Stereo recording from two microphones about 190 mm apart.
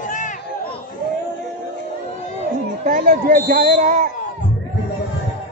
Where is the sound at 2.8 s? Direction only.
50° right (ahead or behind).